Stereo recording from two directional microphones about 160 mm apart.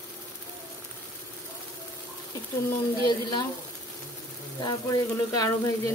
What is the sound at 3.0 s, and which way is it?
Speech, 25° left (ahead or behind).